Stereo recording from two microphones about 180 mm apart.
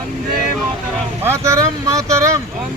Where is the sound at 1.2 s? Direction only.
15° right (ahead or behind).